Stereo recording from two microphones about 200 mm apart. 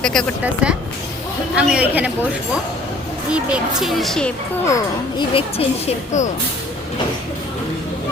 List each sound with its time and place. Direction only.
0.0 s a man's voice: 5° left (ahead or behind)
3.3 s speech: 5° right (ahead or behind)
4.7 s speech: 25° left (ahead or behind)